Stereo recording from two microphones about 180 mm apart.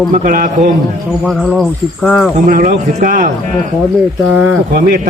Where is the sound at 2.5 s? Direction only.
50° right (ahead or behind).